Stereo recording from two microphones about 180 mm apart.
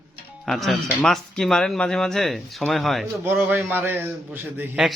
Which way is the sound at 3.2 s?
10° right (ahead or behind).